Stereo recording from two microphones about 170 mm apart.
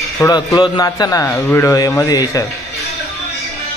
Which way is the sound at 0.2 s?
20° left (ahead or behind).